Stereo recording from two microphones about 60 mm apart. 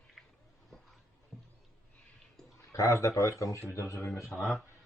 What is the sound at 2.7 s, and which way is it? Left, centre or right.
Speech, left.